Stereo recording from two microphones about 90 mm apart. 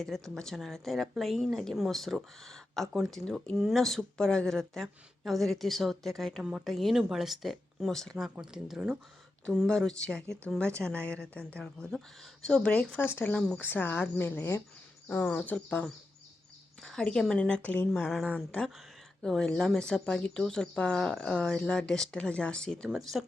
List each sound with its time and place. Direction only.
0.0 s a woman's voice: 5° left (ahead or behind)
13.0 s speech: 25° left (ahead or behind)
16.8 s speech: 5° left (ahead or behind)
17.9 s a woman's voice: 5° left (ahead or behind)